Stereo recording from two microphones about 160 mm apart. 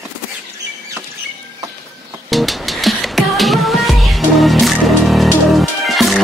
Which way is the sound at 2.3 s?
Centre (ahead or behind).